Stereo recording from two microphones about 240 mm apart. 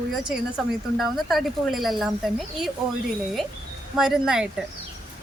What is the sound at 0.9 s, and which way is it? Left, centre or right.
Speech, centre.